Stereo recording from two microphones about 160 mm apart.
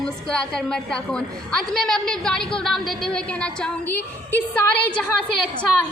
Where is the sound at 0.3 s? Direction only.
5° left (ahead or behind).